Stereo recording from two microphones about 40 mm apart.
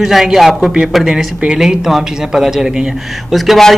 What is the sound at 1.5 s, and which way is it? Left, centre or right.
A man's voice, centre.